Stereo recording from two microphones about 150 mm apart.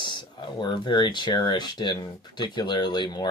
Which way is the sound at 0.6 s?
30° left (ahead or behind).